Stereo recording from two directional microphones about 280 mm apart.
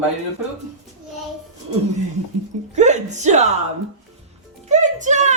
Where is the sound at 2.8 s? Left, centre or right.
Right.